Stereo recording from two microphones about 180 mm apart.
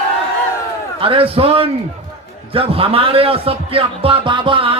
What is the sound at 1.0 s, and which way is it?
A man's voice, 30° right (ahead or behind).